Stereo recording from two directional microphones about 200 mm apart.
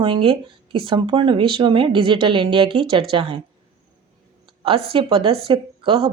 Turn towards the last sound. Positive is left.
turn(degrees=-25)  # may be behind; listen again after turning